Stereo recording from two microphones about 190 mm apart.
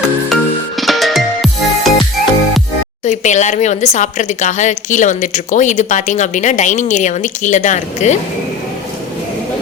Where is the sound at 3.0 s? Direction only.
40° left (ahead or behind).